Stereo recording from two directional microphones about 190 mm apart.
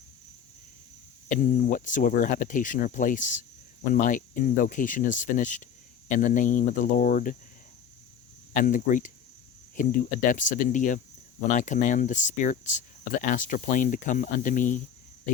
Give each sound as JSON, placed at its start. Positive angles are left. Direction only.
{"t": 1.3, "sound": "speech", "side_deg": 45}
{"t": 8.5, "sound": "speech", "side_deg": 45}